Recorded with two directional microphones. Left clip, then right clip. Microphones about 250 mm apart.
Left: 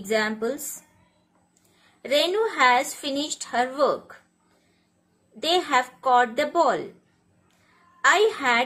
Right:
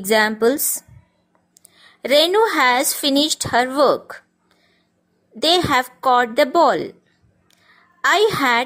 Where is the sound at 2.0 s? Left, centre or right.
Right.